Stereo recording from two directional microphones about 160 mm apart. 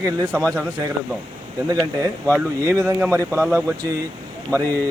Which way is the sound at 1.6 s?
20° right (ahead or behind).